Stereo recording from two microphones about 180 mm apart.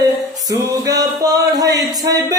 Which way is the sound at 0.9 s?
20° right (ahead or behind).